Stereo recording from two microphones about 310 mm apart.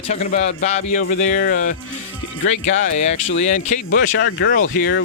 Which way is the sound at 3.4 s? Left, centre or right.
Left.